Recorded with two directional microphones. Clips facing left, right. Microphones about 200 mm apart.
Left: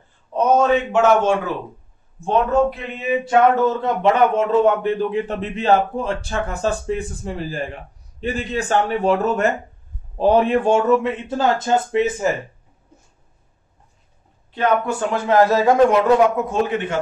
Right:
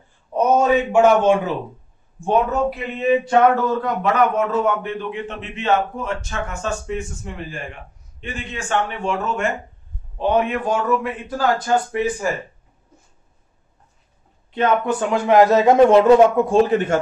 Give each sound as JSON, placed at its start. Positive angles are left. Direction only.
{"t": 0.3, "sound": "a man's voice", "side_deg": -10}
{"t": 2.7, "sound": "a sound", "side_deg": 0}
{"t": 3.6, "sound": "a man's voice", "side_deg": 25}
{"t": 14.5, "sound": "a man's voice", "side_deg": -20}